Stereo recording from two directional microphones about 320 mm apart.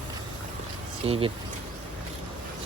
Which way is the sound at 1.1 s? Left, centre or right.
Centre.